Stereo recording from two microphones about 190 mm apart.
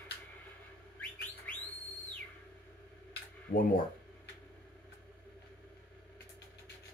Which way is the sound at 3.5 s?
50° left (ahead or behind).